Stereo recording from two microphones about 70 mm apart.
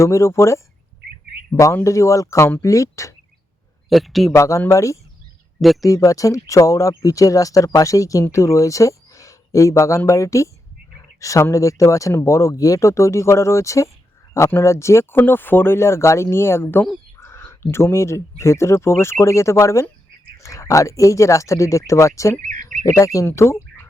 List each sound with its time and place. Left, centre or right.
0.0 s speech: left
1.8 s speech: left
3.8 s a man's voice: centre
4.3 s speech: left
15.2 s speech: left